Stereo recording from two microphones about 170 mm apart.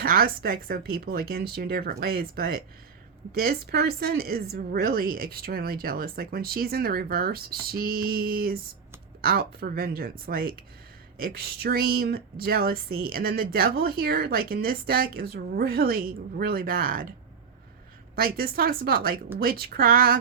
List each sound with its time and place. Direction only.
0.0 s speech: 60° right (ahead or behind)